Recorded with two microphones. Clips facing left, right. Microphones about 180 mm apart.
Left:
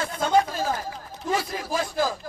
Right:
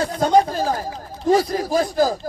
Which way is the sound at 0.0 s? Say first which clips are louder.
Right 5 dB; 40° right (ahead or behind).